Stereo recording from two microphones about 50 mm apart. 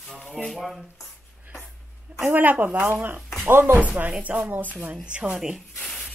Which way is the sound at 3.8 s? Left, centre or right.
Right.